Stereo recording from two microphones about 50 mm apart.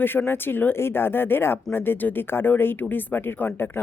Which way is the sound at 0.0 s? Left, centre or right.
Left.